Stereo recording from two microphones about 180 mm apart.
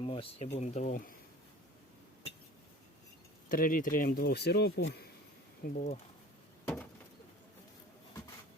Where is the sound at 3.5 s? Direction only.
50° left (ahead or behind); by 5.0 s 70° left (ahead or behind).